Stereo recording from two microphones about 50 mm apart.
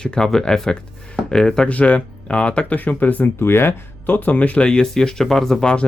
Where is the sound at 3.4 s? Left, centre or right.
Left.